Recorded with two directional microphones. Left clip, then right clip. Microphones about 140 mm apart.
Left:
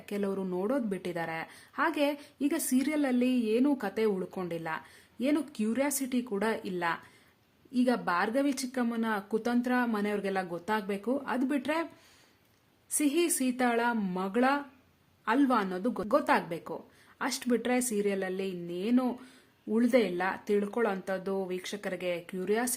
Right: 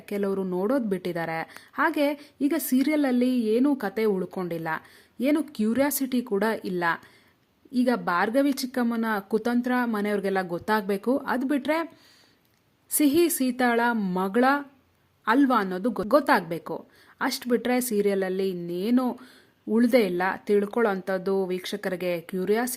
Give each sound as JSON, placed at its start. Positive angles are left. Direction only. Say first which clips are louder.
{"t": 0.0, "sound": "a woman's voice", "louder": "right 6 dB", "side_deg": -25}
{"t": 12.9, "sound": "speech", "louder": "right 7 dB", "side_deg": -40}